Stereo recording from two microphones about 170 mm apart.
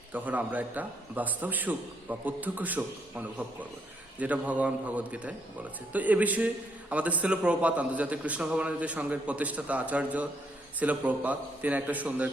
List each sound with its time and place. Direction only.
0.1 s a man's voice: 10° right (ahead or behind)